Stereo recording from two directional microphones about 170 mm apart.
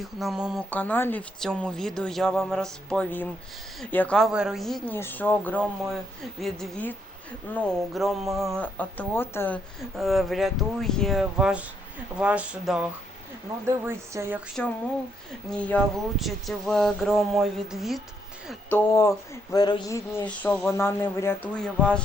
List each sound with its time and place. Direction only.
0.0 s speech: centre (ahead or behind)
0.7 s speech: 10° left (ahead or behind)
4.3 s speech: 5° right (ahead or behind)
4.9 s speech: 10° left (ahead or behind)
10.0 s a woman's voice: centre (ahead or behind)
15.4 s speech: 5° left (ahead or behind)
18.7 s speech: 15° left (ahead or behind)
20.1 s speech: 10° left (ahead or behind)